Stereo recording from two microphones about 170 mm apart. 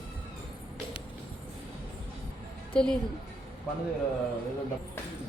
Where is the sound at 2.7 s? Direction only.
5° left (ahead or behind).